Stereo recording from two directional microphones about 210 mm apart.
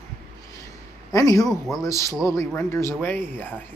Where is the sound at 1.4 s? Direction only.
Centre (ahead or behind).